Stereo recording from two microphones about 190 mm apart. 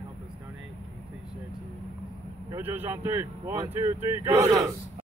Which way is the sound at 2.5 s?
10° right (ahead or behind).